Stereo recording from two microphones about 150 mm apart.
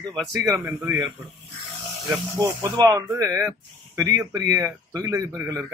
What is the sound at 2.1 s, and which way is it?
Speech, 20° right (ahead or behind).